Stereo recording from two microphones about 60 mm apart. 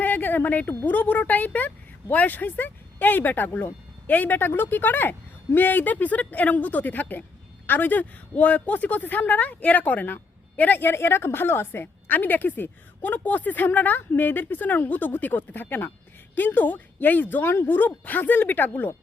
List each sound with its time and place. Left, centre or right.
0.0 s a sound: left
0.9 s a woman's voice: left
17.3 s a woman's voice: left